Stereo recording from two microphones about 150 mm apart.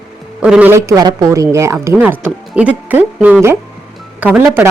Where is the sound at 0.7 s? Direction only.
20° right (ahead or behind).